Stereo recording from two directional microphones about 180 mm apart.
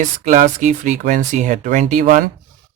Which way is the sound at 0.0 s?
45° right (ahead or behind).